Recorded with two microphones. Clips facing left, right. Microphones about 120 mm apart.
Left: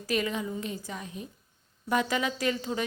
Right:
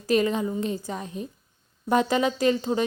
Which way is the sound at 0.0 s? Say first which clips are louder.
Right 7 dB; 30° right (ahead or behind).